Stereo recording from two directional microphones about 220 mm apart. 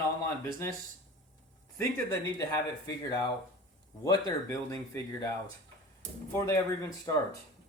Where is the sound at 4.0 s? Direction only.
15° left (ahead or behind).